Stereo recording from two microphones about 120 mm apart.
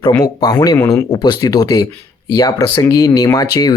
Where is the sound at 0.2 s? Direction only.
30° left (ahead or behind).